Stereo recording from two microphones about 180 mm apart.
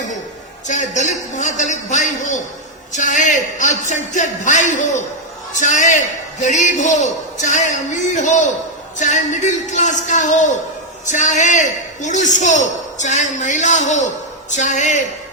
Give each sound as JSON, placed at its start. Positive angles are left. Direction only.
{"t": 0.7, "sound": "a man's voice", "side_deg": 40}